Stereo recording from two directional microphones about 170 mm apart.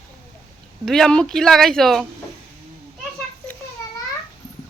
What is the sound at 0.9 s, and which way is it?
Speech, 5° left (ahead or behind).